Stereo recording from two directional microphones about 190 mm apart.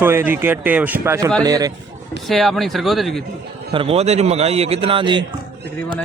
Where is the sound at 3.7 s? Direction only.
30° right (ahead or behind).